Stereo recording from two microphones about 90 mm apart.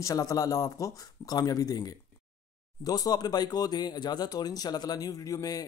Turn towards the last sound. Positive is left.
turn(degrees=40)  # may be behind; listen again after turning